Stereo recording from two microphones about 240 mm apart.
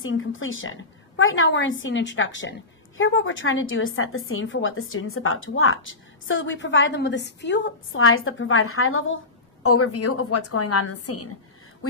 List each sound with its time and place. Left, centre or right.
0.0 s a woman's voice: left